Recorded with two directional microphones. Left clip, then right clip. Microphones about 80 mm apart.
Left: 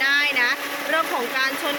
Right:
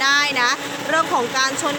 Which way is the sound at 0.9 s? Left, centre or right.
Right.